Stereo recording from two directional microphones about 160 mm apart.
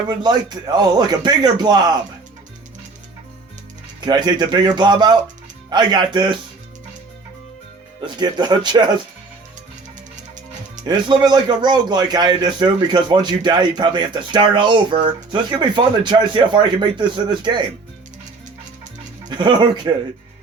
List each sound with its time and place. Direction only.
0.1 s a man's voice: 25° right (ahead or behind)
4.0 s a man's voice: 25° right (ahead or behind)
8.0 s a man's voice: 25° right (ahead or behind)
10.8 s a man's voice: 25° right (ahead or behind)
19.3 s a man's voice: 30° right (ahead or behind)